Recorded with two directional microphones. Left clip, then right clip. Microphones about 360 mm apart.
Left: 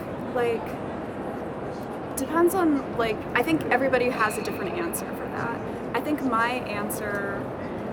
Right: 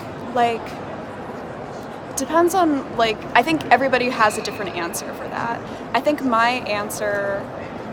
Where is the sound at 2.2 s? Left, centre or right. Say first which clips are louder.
Right 6 dB; centre.